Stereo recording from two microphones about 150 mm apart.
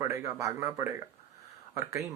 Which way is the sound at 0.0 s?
20° right (ahead or behind).